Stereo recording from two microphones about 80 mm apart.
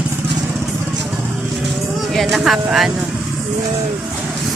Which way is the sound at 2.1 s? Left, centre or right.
Centre.